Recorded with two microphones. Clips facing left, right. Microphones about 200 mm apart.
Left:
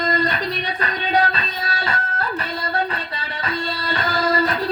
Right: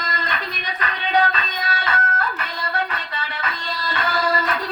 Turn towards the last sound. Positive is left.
turn(degrees=40)  # may be behind; listen again after turning